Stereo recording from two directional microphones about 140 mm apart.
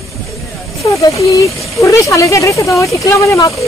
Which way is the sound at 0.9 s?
20° left (ahead or behind).